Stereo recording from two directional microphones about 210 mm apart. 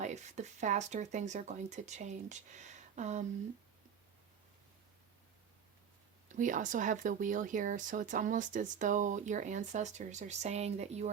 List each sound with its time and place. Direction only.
0.0 s speech: 35° right (ahead or behind)
6.2 s speech: 40° right (ahead or behind)